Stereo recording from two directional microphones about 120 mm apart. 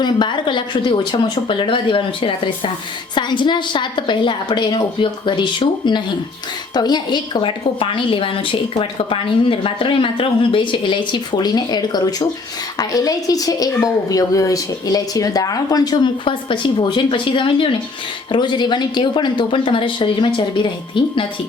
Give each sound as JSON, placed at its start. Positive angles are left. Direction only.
{"t": 0.0, "sound": "a woman's voice", "side_deg": 40}